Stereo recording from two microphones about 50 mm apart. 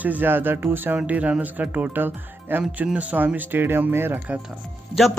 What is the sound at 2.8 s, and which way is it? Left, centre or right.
Speech, right.